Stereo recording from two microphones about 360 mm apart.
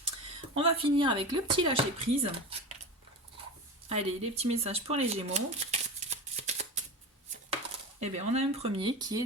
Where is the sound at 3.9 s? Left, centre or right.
Centre.